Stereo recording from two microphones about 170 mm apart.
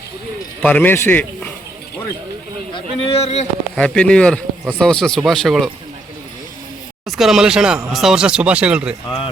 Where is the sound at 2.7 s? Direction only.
35° left (ahead or behind).